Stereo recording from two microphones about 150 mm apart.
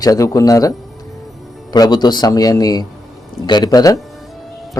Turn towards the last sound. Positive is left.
turn(degrees=25)  # may be behind; listen again after turning